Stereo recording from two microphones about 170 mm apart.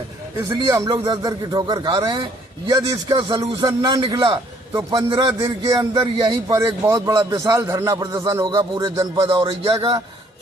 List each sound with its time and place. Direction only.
0.3 s a man's voice: 20° right (ahead or behind)
6.5 s a man's voice: 20° right (ahead or behind)